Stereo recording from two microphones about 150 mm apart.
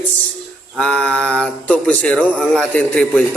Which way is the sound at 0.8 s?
5° left (ahead or behind).